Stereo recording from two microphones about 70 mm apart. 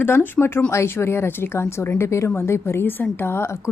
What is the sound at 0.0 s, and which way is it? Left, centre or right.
A woman's voice, left.